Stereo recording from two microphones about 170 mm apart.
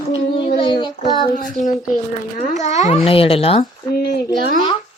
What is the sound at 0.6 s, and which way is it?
Child singing, 30° left (ahead or behind).